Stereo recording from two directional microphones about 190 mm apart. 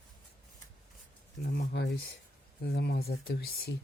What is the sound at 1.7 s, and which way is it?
Speech, 65° left (ahead or behind).